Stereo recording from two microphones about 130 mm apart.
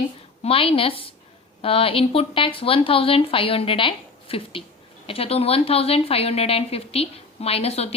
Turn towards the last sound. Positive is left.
turn(degrees=50)  # may be behind; listen again after turning